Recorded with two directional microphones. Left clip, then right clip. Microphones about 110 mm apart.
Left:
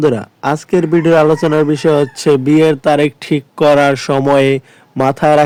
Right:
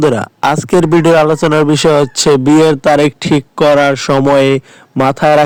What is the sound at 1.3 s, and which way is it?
Speech, 90° right.